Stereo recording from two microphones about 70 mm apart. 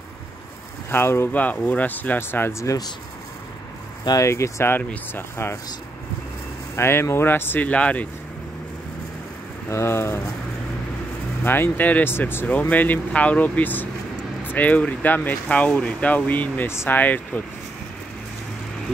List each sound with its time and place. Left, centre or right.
0.8 s speech: left
1.3 s speech: left
4.2 s speech: left
4.7 s speech: left
6.7 s speech: left; by 8.1 s centre
9.7 s speech: left
11.4 s speech: left
12.4 s speech: left